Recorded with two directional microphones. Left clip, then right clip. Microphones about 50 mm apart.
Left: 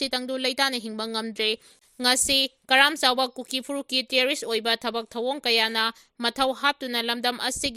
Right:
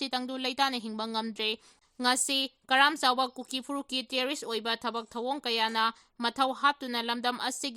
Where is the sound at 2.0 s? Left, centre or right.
Left.